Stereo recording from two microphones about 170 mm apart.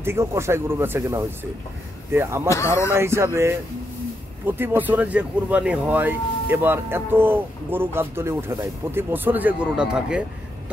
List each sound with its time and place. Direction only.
0.0 s speech: 15° right (ahead or behind)
2.5 s speech: 15° left (ahead or behind)
2.9 s speech: 15° right (ahead or behind)
4.5 s speech: 10° right (ahead or behind)